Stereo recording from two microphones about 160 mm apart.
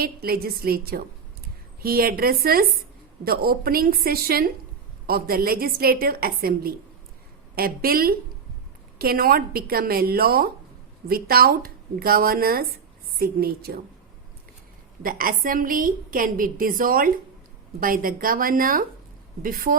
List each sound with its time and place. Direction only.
0.0 s a woman's voice: 70° right (ahead or behind)
15.0 s a woman's voice: 60° right (ahead or behind)